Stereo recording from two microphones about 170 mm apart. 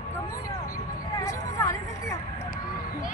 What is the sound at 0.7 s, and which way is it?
Hubbub, 55° left (ahead or behind).